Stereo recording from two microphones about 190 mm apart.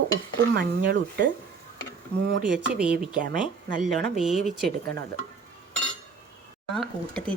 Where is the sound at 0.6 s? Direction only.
50° right (ahead or behind).